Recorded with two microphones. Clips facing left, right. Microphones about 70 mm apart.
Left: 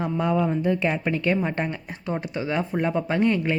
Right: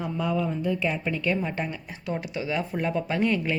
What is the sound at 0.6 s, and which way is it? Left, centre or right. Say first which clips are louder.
Speech: left 4 dB; left.